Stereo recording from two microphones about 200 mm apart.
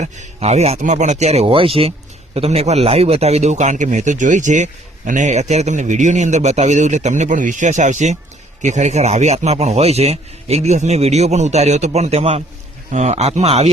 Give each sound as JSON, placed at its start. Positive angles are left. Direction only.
{"t": 0.0, "sound": "a man's voice", "side_deg": -35}